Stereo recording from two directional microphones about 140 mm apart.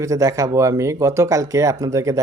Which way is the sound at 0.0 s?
25° right (ahead or behind).